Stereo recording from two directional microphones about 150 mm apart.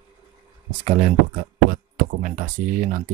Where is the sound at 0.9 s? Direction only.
65° right (ahead or behind).